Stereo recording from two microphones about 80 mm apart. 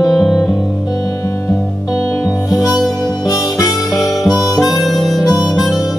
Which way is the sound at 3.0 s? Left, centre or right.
Left.